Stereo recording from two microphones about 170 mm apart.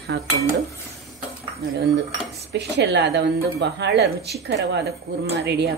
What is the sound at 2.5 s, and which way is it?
Speech, 85° right.